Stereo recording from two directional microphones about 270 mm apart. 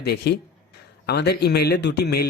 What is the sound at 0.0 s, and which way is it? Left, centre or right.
Speech, left.